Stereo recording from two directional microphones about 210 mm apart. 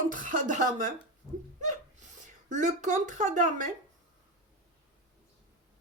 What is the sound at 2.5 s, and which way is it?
Speech, 35° right (ahead or behind).